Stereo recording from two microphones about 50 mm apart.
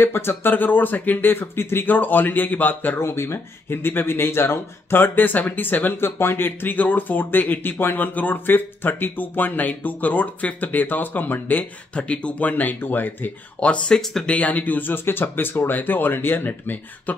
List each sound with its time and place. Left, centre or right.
0.0 s speech: left
1.9 s speech: left
3.0 s speech: left
5.9 s speech: left
11.9 s speech: left
13.6 s speech: centre
14.3 s speech: left